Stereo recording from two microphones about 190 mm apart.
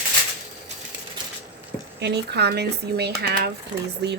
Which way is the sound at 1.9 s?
60° right (ahead or behind).